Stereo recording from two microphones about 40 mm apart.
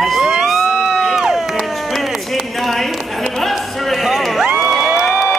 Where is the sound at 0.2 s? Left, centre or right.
Centre.